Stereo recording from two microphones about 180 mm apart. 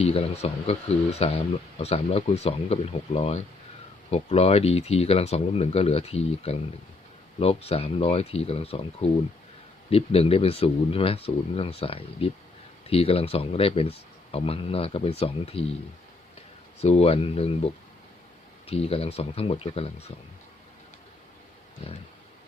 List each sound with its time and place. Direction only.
0.0 s speech: 35° left (ahead or behind)
16.8 s speech: 35° left (ahead or behind)
21.8 s speech: 35° left (ahead or behind)